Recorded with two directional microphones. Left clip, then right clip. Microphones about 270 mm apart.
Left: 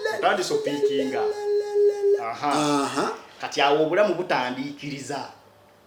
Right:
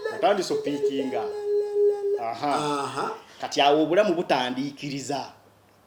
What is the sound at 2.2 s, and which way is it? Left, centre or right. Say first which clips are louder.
Speech: left 1 dB; right.